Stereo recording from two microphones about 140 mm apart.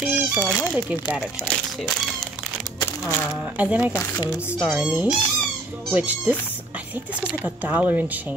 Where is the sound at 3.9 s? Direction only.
25° left (ahead or behind).